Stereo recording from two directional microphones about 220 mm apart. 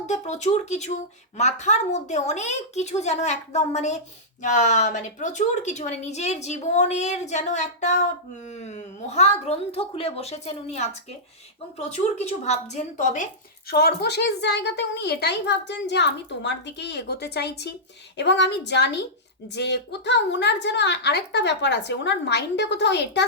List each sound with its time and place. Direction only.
0.1 s a woman's voice: 30° left (ahead or behind)
13.7 s a woman's voice: 45° left (ahead or behind)